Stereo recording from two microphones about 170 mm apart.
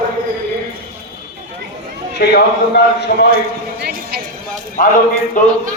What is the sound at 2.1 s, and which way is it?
A man's voice, 75° left (ahead or behind).